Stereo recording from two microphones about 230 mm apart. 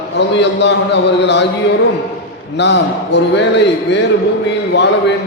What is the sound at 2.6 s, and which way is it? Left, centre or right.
A man's voice, left.